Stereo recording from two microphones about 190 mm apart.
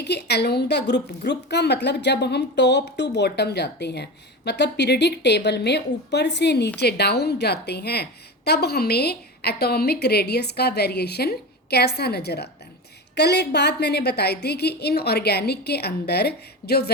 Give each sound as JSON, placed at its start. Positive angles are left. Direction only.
{"t": 0.0, "sound": "a woman's voice", "side_deg": 60}